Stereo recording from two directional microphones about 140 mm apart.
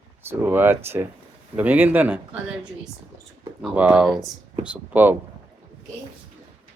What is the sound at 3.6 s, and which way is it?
Speech, 10° right (ahead or behind).